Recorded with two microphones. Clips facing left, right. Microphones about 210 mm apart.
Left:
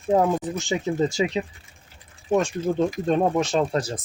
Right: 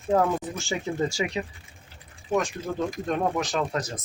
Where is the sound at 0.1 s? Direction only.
20° left (ahead or behind).